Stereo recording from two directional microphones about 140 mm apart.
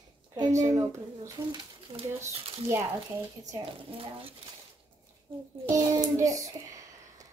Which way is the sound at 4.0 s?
40° right (ahead or behind).